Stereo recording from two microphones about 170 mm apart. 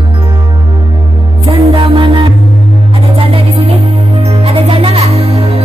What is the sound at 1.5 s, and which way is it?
Music, 30° right (ahead or behind).